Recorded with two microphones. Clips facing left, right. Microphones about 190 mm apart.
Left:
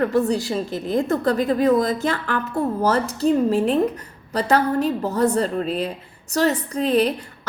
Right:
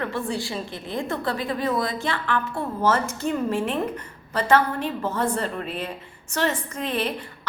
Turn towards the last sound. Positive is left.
turn(degrees=40)  # may be behind; listen again after turning